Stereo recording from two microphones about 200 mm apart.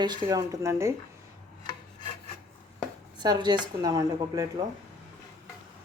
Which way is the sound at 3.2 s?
20° right (ahead or behind).